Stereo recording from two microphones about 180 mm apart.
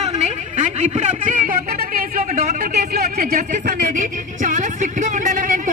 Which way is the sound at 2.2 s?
40° right (ahead or behind).